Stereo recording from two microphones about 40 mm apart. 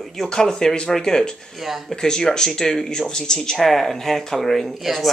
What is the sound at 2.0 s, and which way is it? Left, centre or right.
Speech, centre.